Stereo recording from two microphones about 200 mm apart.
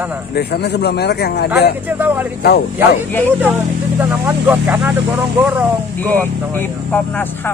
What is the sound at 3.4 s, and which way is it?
Speech, 10° right (ahead or behind).